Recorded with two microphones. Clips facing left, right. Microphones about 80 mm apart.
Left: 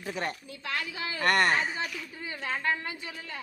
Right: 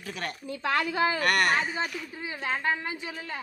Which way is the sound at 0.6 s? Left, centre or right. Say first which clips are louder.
Right 9 dB; right.